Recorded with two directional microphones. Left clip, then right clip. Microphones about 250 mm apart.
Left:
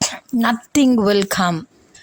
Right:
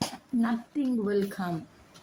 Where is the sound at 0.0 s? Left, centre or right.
Left.